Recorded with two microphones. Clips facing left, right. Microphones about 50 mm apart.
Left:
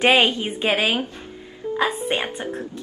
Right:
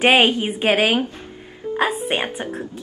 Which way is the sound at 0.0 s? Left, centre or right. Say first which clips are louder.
Right 2 dB; right.